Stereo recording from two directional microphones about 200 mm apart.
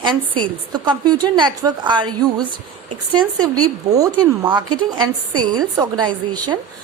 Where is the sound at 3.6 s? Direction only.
20° right (ahead or behind).